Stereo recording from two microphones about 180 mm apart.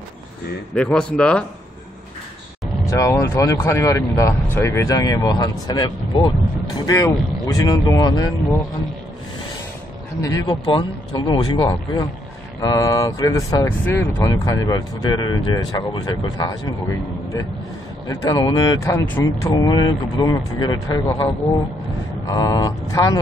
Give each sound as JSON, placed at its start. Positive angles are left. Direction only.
{"t": 0.7, "sound": "speech", "side_deg": 5}
{"t": 2.9, "sound": "speech", "side_deg": 15}
{"t": 10.2, "sound": "speech", "side_deg": 20}
{"t": 18.0, "sound": "speech", "side_deg": 20}
{"t": 18.9, "sound": "speech", "side_deg": 15}
{"t": 22.3, "sound": "speech", "side_deg": 20}